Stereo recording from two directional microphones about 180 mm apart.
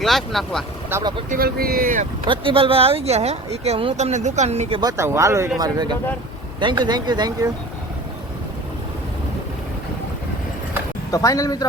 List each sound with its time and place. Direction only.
0.0 s speech: centre (ahead or behind)
0.9 s speech: 15° right (ahead or behind)
1.3 s speech: 55° right (ahead or behind)
2.2 s speech: 30° right (ahead or behind)
4.8 s speech: 15° right (ahead or behind)
11.1 s speech: 20° left (ahead or behind)